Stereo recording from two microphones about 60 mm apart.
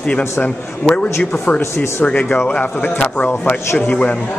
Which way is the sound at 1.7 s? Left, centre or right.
Left.